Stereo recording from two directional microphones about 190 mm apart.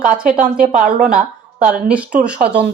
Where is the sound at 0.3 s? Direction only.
45° right (ahead or behind).